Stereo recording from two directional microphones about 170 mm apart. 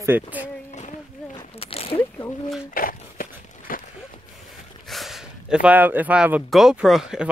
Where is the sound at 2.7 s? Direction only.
55° left (ahead or behind).